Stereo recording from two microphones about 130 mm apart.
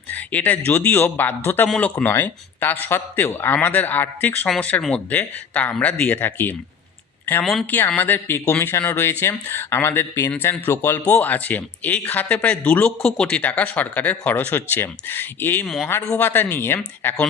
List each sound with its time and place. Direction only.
0.1 s speech: 15° left (ahead or behind)
7.7 s speech: 15° left (ahead or behind)
15.6 s speech: centre (ahead or behind)
16.0 s speech: 15° left (ahead or behind)